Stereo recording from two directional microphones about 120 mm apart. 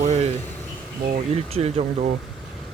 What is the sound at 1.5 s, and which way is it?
Speech, 70° right (ahead or behind).